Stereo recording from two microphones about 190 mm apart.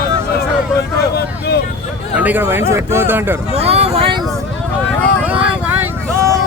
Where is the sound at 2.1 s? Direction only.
10° right (ahead or behind).